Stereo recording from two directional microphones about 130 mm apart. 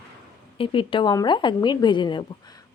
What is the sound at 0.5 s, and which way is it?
A woman's voice, 40° left (ahead or behind).